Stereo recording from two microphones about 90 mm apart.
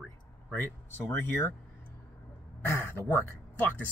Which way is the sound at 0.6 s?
25° left (ahead or behind).